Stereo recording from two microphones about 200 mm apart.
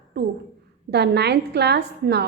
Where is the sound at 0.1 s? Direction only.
55° right (ahead or behind).